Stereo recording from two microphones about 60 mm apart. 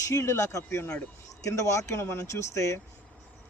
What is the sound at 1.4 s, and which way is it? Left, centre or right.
Speech, left.